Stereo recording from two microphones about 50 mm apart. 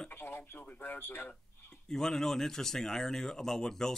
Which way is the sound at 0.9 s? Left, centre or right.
Left.